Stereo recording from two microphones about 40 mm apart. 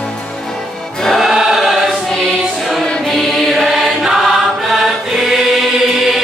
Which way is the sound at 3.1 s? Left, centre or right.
Centre.